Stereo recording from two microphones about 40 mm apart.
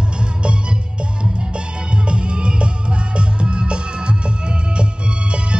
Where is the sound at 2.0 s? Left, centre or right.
Right.